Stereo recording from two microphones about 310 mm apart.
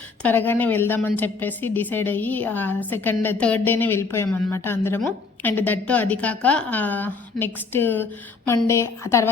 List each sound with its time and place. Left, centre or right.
0.2 s a woman's voice: centre